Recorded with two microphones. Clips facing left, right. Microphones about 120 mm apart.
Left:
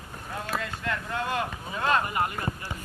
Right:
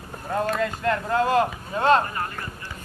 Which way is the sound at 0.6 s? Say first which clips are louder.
Right 8 dB; 45° right (ahead or behind).